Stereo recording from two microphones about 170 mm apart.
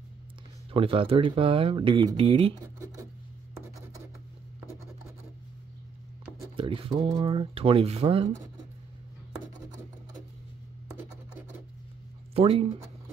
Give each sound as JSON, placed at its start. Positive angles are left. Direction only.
{"t": 0.7, "sound": "speech", "side_deg": -35}
{"t": 2.6, "sound": "speech", "side_deg": -20}
{"t": 6.5, "sound": "speech", "side_deg": -30}
{"t": 12.4, "sound": "speech", "side_deg": -35}